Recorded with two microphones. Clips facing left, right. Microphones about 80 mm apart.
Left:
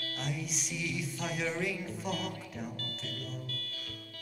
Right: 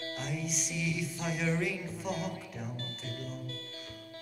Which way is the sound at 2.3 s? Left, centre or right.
Centre.